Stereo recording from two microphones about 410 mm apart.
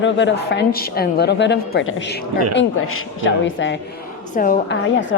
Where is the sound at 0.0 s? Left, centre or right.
Left.